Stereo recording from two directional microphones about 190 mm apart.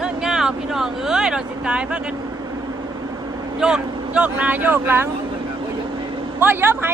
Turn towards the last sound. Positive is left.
turn(degrees=-10)  # may be behind; listen again after turning